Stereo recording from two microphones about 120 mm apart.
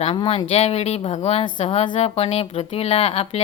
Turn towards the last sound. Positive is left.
turn(degrees=55)  # may be behind; listen again after turning